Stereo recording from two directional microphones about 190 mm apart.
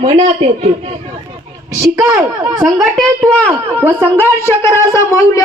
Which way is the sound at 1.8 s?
15° right (ahead or behind).